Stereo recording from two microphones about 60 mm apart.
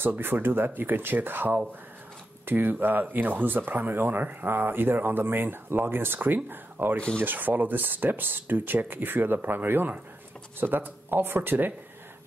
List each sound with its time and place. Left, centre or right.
0.2 s speech: right